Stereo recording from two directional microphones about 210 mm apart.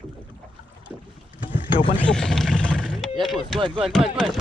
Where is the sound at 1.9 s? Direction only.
5° left (ahead or behind).